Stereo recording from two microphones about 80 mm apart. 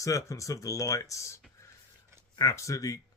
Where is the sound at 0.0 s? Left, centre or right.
Left.